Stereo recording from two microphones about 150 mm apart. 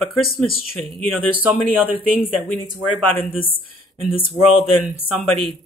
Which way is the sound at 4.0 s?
35° left (ahead or behind).